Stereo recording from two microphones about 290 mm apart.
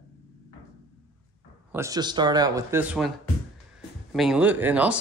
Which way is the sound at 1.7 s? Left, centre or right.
Centre.